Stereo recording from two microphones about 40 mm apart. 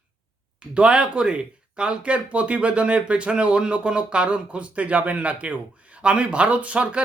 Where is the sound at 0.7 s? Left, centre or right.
Right.